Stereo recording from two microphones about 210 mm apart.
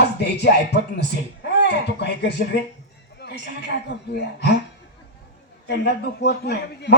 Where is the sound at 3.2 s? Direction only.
50° left (ahead or behind).